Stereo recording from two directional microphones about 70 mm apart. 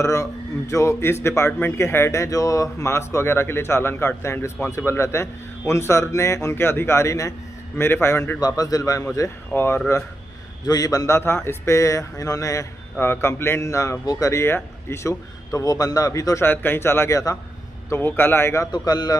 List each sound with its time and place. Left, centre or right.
0.0 s a man's voice: left
8.4 s a man's voice: left
9.5 s a man's voice: left
10.7 s a man's voice: left
11.1 s speech: left
13.0 s a man's voice: left
15.5 s a man's voice: left
16.4 s a man's voice: left
18.7 s a man's voice: left